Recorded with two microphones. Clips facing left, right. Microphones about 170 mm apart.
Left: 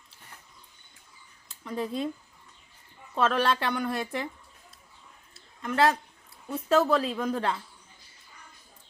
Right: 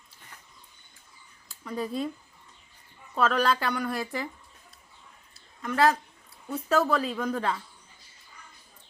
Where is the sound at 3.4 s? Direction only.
Centre (ahead or behind).